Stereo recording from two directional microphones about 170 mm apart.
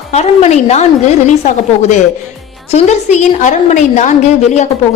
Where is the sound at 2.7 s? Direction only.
40° left (ahead or behind).